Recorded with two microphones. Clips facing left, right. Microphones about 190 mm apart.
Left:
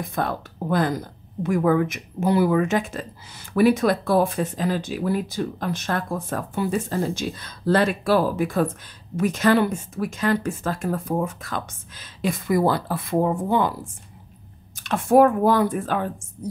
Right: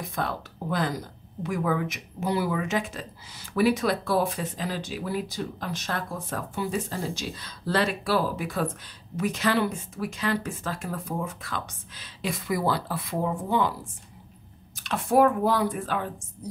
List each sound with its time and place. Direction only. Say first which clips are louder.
0.0 s speech: left 5 dB; 50° left (ahead or behind)
14.8 s speech: left 5 dB; 50° left (ahead or behind)